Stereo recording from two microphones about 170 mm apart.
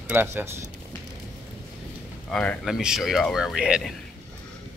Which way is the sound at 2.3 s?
5° left (ahead or behind).